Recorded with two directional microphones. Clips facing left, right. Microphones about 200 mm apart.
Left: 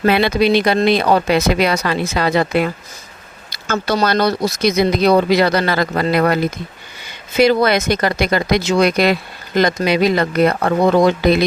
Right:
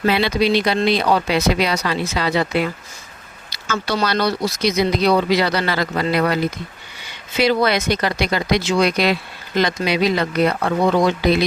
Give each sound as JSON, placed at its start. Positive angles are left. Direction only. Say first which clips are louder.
{"t": 0.0, "sound": "speech", "louder": "left 3 dB", "side_deg": 55}